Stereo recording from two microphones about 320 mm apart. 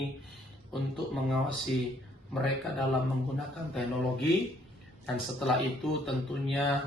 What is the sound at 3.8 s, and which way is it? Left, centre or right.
Speech, centre.